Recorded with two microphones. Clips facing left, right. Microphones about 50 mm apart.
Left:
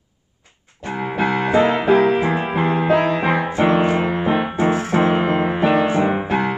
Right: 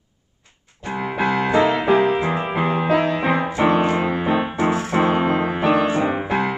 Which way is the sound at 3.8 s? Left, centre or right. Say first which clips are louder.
Left 1 dB; centre.